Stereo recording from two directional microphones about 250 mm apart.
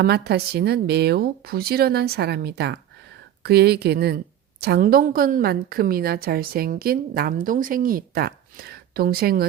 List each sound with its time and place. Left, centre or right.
0.0 s a woman's voice: right